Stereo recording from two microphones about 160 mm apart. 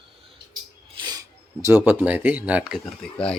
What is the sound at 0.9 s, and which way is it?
Speech, 25° right (ahead or behind).